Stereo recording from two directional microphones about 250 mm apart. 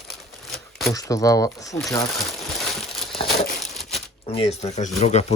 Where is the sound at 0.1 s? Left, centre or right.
Centre.